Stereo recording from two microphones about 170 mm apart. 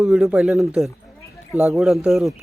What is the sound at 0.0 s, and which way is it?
Speech, centre (ahead or behind).